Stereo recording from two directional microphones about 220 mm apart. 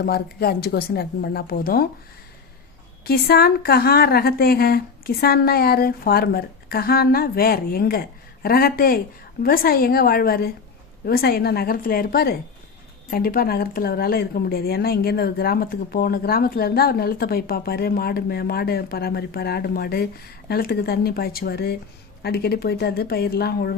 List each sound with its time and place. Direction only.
0.0 s a woman's voice: 45° left (ahead or behind)
3.0 s a woman's voice: 45° left (ahead or behind)